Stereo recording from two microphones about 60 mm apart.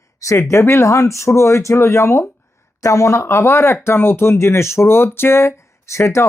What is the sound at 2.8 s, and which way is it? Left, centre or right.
Speech, left.